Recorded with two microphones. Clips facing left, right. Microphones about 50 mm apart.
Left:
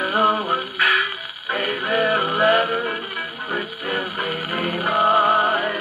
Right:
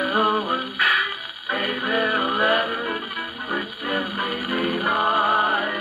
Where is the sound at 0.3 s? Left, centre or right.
Centre.